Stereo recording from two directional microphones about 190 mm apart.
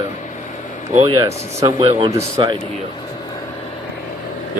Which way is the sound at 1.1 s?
15° right (ahead or behind).